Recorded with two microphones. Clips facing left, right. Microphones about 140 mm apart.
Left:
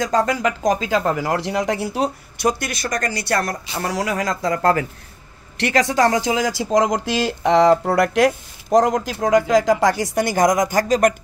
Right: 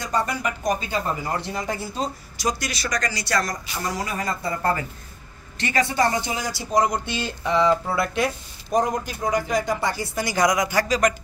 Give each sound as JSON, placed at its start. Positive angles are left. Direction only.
{"t": 0.0, "sound": "speech", "side_deg": 90}
{"t": 3.8, "sound": "speech", "side_deg": 80}
{"t": 10.2, "sound": "speech", "side_deg": 50}